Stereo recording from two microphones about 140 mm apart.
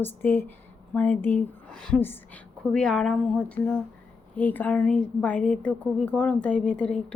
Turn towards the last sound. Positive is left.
turn(degrees=10)  # may be behind; listen again after turning